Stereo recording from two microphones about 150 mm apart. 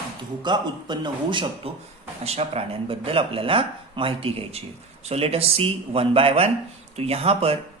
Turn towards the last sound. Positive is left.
turn(degrees=-40)  # may be behind; listen again after turning